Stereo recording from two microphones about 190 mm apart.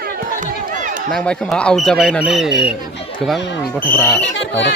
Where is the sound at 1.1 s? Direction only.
5° left (ahead or behind).